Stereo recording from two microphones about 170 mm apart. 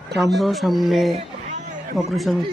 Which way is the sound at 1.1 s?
45° right (ahead or behind).